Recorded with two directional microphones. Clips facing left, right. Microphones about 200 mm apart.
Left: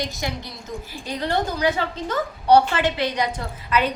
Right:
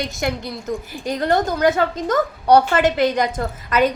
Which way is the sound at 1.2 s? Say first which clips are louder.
Right 5 dB; 50° right (ahead or behind).